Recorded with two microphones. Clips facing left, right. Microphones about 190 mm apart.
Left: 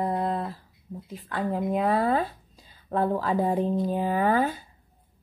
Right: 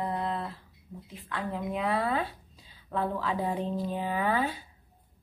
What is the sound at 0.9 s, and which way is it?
A woman's voice, 30° left (ahead or behind).